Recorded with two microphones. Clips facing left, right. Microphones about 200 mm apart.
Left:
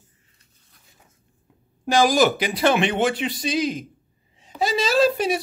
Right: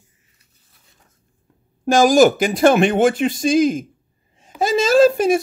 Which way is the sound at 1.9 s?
45° right (ahead or behind).